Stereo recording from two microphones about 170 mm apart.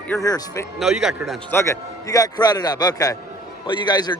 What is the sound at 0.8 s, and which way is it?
Speech, 5° right (ahead or behind).